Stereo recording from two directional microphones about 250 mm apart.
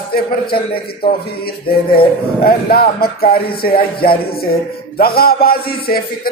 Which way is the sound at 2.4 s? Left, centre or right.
Left.